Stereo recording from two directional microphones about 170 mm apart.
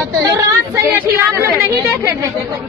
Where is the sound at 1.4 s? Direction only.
15° right (ahead or behind).